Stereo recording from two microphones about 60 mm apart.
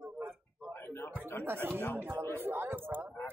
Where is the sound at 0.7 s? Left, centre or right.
Left.